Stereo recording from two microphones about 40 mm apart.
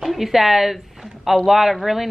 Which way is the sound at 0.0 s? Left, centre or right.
Centre.